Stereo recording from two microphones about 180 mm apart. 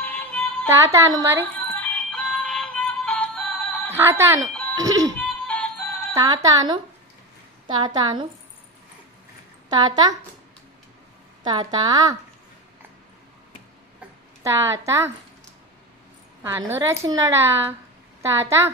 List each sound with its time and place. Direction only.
0.0 s child singing: 5° left (ahead or behind)
0.7 s a woman's voice: 15° right (ahead or behind)
1.4 s music: 10° left (ahead or behind)
3.9 s a woman's voice: 10° right (ahead or behind)
5.1 s music: 5° left (ahead or behind)
6.1 s a woman's voice: 20° right (ahead or behind)
9.7 s a woman's voice: 20° right (ahead or behind)
11.4 s a woman's voice: 25° right (ahead or behind)
14.4 s a woman's voice: 15° right (ahead or behind)
16.4 s a woman's voice: 15° right (ahead or behind)